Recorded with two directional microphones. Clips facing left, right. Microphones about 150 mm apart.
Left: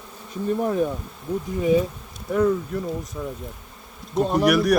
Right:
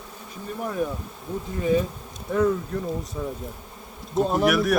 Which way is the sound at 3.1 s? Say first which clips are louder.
Right 1 dB; 10° right (ahead or behind).